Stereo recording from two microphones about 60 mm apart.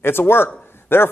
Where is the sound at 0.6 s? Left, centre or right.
Left.